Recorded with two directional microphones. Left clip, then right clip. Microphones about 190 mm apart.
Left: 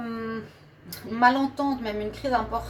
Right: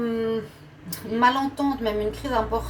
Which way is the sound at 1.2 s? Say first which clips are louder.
Even; 40° left (ahead or behind).